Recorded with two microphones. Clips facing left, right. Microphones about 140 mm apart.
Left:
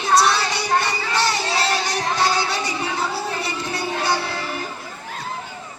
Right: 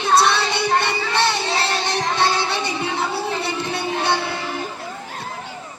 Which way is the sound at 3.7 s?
25° right (ahead or behind).